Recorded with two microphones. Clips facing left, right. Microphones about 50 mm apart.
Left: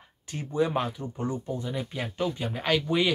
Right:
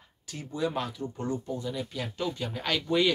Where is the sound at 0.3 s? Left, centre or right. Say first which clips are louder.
Left 5 dB; left.